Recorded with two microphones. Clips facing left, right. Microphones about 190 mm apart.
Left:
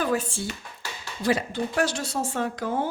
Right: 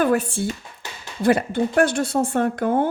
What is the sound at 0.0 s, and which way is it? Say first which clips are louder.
A woman's voice: right 6 dB; 60° right (ahead or behind).